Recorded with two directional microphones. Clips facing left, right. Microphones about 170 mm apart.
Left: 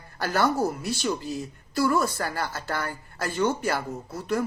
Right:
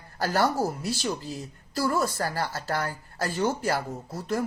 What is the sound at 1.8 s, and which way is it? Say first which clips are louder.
Speech: left 2 dB; 35° right (ahead or behind).